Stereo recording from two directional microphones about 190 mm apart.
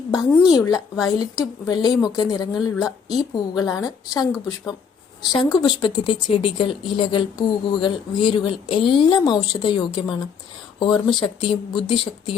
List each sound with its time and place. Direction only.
0.5 s speech: 20° left (ahead or behind)